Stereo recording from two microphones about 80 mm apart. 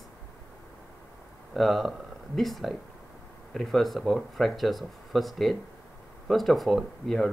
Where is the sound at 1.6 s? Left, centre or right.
Centre.